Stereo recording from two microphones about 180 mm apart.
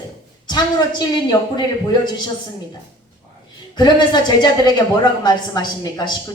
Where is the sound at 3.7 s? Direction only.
25° left (ahead or behind).